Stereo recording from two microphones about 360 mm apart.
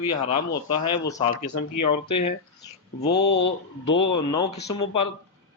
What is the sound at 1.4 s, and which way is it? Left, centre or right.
Speech, left.